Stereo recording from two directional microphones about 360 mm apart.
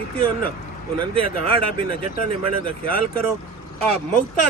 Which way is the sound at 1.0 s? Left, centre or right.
Right.